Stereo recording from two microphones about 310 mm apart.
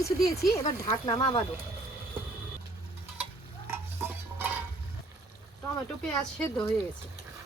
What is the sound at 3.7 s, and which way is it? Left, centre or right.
Stir, centre.